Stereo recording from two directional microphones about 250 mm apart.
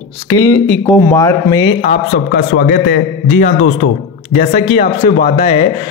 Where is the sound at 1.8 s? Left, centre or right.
Left.